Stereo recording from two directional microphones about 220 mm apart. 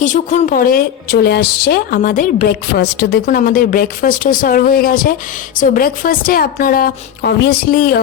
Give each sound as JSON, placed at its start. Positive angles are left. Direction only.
{"t": 0.0, "sound": "a woman's voice", "side_deg": 35}